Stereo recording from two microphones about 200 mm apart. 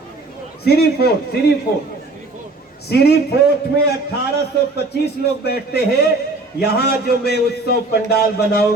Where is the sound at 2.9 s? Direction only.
55° left (ahead or behind).